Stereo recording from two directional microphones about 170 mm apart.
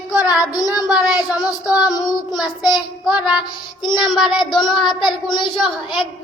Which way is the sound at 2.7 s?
5° right (ahead or behind).